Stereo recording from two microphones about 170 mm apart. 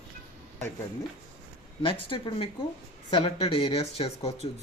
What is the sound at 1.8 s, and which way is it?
Speech, 30° left (ahead or behind).